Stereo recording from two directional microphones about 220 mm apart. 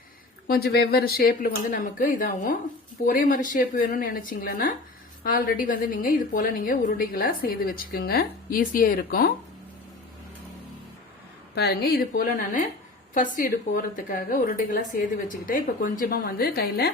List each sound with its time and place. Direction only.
0.4 s a woman's voice: 45° left (ahead or behind)
11.5 s a woman's voice: 45° left (ahead or behind)